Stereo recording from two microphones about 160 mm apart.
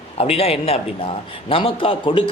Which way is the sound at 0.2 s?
40° left (ahead or behind).